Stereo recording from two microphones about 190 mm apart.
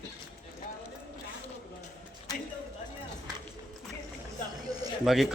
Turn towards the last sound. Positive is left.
turn(degrees=0)  # may be behind; listen again after turning